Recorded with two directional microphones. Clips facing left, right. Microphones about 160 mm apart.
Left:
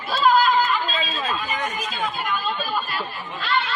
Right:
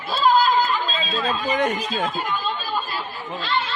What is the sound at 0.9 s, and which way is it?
Speech, 30° right (ahead or behind).